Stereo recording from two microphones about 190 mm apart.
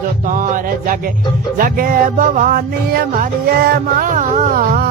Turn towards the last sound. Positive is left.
turn(degrees=-45)  # may be behind; listen again after turning